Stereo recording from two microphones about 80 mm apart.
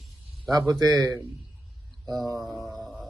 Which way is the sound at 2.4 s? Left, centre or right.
Right.